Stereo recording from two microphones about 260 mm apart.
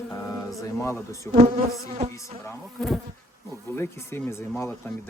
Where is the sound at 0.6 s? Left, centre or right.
Centre.